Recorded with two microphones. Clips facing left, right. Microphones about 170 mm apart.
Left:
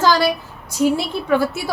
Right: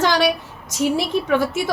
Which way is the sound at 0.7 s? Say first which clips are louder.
Left 2 dB; 85° right.